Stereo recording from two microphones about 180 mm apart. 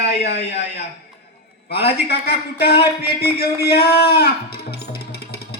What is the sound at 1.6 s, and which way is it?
Speech, 65° left (ahead or behind).